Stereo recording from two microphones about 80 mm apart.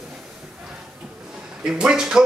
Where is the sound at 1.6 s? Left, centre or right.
Centre.